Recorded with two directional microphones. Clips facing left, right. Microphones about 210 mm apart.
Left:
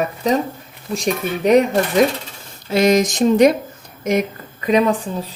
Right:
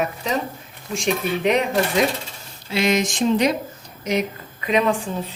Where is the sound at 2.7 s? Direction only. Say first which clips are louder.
Left 6 dB; 40° left (ahead or behind).